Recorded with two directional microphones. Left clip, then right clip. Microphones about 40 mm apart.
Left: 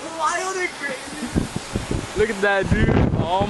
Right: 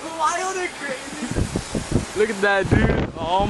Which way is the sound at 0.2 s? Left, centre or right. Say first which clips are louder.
Even; right.